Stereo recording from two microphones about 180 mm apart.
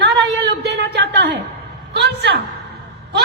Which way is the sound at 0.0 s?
75° right (ahead or behind).